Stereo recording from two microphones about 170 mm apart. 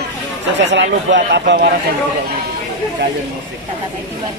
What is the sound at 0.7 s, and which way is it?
Speech, 90° right.